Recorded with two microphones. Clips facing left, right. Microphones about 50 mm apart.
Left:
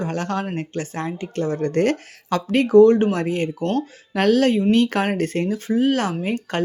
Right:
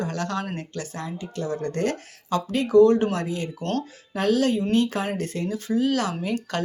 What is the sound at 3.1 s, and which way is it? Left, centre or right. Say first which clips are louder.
Speech: left 5 dB; left.